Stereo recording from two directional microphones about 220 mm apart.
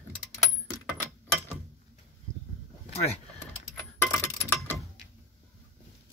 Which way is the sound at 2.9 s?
30° left (ahead or behind).